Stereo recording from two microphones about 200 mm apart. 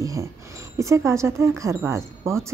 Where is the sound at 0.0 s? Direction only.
15° right (ahead or behind).